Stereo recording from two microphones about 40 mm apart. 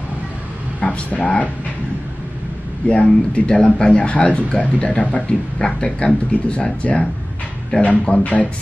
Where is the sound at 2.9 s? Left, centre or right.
Left.